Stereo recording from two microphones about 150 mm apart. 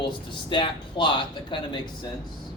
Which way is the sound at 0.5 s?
35° left (ahead or behind).